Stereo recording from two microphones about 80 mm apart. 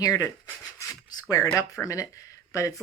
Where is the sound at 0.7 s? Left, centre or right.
Left.